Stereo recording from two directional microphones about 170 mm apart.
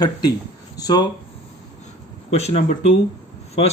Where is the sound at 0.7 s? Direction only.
25° left (ahead or behind).